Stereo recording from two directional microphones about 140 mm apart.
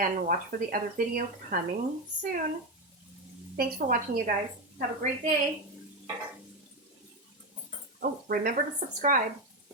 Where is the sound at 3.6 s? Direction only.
90° right.